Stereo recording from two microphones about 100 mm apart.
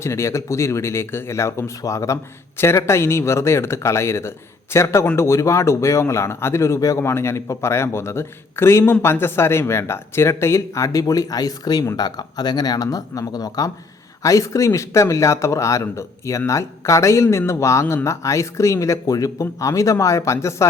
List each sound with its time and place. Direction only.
0.0 s a man's voice: 30° left (ahead or behind)